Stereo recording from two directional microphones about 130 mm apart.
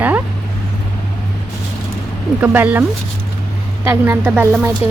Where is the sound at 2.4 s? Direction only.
10° right (ahead or behind).